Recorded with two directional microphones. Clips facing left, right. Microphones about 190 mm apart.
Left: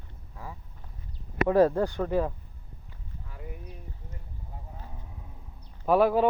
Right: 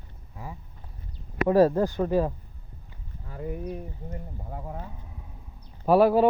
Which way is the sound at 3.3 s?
45° right (ahead or behind).